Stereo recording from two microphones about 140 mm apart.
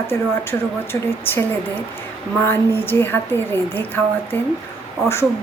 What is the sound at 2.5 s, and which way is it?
A woman's voice, 15° left (ahead or behind).